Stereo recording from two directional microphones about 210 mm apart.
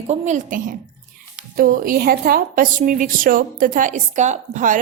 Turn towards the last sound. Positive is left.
turn(degrees=-35)  # may be behind; listen again after turning